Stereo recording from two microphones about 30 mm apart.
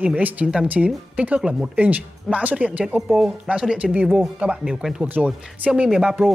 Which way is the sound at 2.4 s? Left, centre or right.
Right.